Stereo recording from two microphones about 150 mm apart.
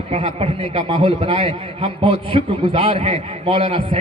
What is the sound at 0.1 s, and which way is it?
A man's voice, 45° right (ahead or behind).